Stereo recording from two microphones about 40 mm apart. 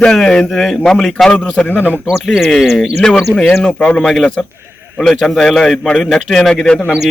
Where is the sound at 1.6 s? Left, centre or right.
Left.